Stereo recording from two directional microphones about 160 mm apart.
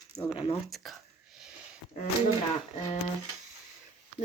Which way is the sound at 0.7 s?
Centre (ahead or behind).